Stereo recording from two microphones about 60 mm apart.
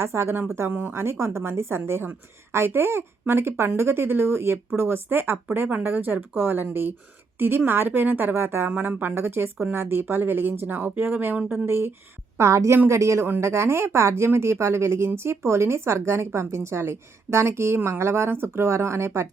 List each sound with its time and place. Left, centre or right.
0.0 s speech: right
0.7 s speech: right
0.9 s a woman's voice: right
11.3 s speech: right
11.6 s a woman's voice: right
12.4 s speech: right